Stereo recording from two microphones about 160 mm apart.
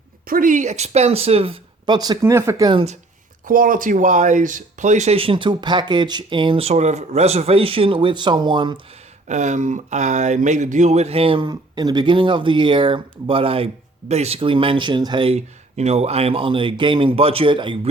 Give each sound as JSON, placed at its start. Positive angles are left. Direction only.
{"t": 0.3, "sound": "speech", "side_deg": -60}
{"t": 2.0, "sound": "speech", "side_deg": -20}
{"t": 3.4, "sound": "speech", "side_deg": -60}
{"t": 9.2, "sound": "speech", "side_deg": -45}